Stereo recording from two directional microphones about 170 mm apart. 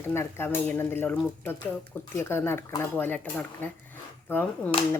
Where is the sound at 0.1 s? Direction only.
15° left (ahead or behind).